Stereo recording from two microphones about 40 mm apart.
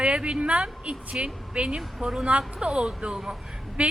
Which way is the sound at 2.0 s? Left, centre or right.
Centre.